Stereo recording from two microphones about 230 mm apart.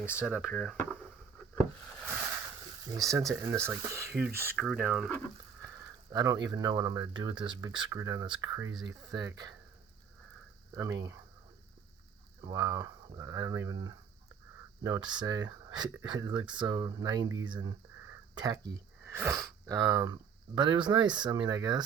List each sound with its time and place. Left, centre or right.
0.0 s speech: centre
2.9 s speech: centre
6.1 s speech: centre
12.5 s speech: centre